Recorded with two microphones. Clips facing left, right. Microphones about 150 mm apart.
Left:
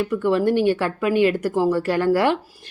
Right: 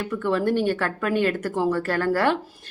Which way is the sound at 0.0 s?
10° left (ahead or behind).